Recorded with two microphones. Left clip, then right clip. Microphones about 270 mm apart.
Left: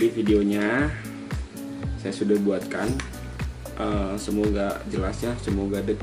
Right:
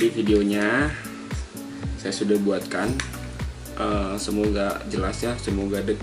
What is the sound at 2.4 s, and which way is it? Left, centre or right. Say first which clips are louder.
Speech: right 1 dB; centre.